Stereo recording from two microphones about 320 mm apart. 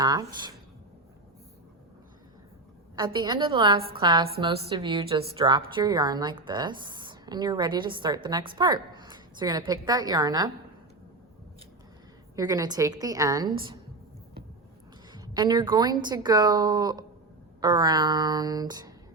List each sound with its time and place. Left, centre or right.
0.0 s a woman's voice: centre
2.9 s a woman's voice: centre
12.4 s a woman's voice: centre
15.1 s a woman's voice: centre